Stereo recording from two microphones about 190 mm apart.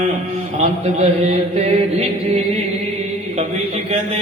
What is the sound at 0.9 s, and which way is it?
Chant, 35° right (ahead or behind).